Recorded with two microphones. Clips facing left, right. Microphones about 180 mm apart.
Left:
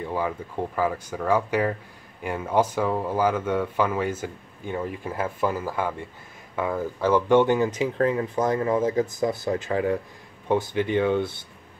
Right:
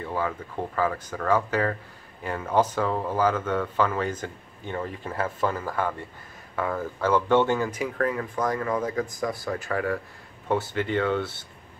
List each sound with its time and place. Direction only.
0.0 s speech: 15° left (ahead or behind)